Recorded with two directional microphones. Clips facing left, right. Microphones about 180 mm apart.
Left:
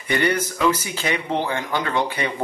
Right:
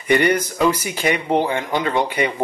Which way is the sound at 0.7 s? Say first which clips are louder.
Right 2 dB; 15° right (ahead or behind).